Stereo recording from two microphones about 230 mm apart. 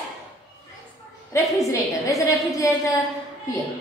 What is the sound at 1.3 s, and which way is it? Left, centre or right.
A woman's voice, centre.